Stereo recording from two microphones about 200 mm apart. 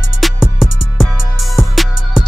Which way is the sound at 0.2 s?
Centre (ahead or behind).